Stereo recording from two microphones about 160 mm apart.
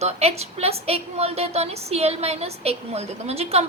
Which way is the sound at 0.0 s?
40° right (ahead or behind).